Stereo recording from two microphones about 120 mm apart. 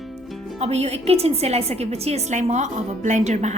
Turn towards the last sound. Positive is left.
turn(degrees=-70)  # may be behind; listen again after turning